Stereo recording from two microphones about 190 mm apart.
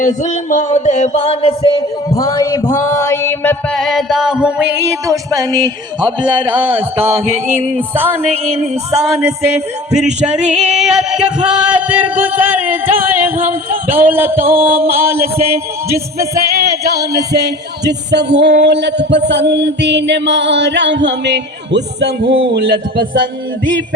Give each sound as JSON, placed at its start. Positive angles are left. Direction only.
{"t": 0.0, "sound": "music", "side_deg": 40}
{"t": 2.0, "sound": "a sound", "side_deg": 15}
{"t": 5.6, "sound": "a man's voice", "side_deg": -25}
{"t": 6.4, "sound": "music", "side_deg": -10}
{"t": 8.7, "sound": "music", "side_deg": -35}
{"t": 9.6, "sound": "music", "side_deg": -5}
{"t": 16.6, "sound": "music", "side_deg": -55}
{"t": 17.3, "sound": "speech", "side_deg": -60}